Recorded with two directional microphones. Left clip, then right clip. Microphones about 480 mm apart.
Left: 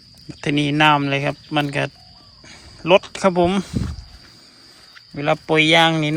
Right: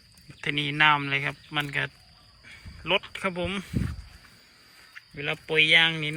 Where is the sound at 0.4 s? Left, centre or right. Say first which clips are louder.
Left 6 dB; centre.